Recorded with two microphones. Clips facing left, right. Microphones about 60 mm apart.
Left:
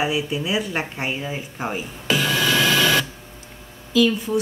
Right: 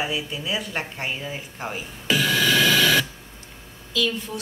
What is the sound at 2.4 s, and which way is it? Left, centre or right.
Printer, left.